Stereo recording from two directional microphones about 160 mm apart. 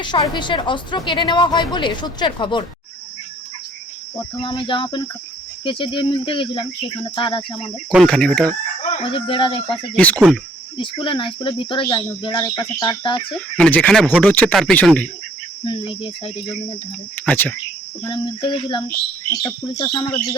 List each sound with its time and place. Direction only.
0.0 s a woman's voice: 30° left (ahead or behind)
4.4 s speech: 30° left (ahead or behind)
7.9 s speech: 5° left (ahead or behind)
8.8 s speech: 40° left (ahead or behind)
9.9 s speech: 10° left (ahead or behind)
10.8 s a woman's voice: 30° left (ahead or behind)
13.6 s speech: 10° left (ahead or behind)
15.6 s speech: 30° left (ahead or behind)
17.2 s speech: 10° left (ahead or behind)
18.1 s a woman's voice: 30° left (ahead or behind)